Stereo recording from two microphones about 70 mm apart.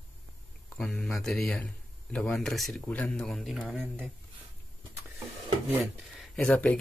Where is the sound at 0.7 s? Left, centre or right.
Centre.